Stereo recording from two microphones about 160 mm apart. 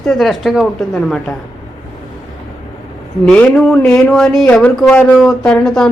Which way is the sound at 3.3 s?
5° left (ahead or behind).